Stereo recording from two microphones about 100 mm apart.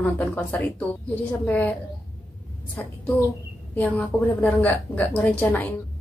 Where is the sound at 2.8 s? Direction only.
15° left (ahead or behind).